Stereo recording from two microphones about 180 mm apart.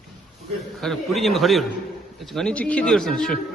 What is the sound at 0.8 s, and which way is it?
Speech, centre (ahead or behind).